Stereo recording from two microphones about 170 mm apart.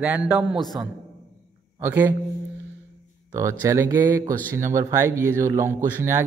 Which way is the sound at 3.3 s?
15° right (ahead or behind).